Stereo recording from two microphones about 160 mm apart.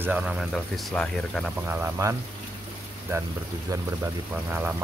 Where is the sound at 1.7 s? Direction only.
15° right (ahead or behind).